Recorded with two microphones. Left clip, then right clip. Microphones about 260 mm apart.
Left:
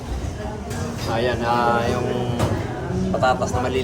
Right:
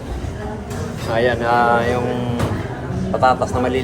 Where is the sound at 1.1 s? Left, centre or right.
Centre.